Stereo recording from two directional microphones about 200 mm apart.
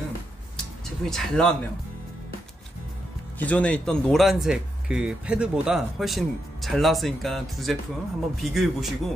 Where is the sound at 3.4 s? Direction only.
5° left (ahead or behind).